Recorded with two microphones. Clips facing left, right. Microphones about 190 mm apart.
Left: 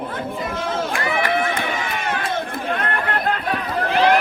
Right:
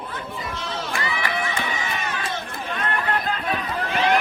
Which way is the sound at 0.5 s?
50° left (ahead or behind).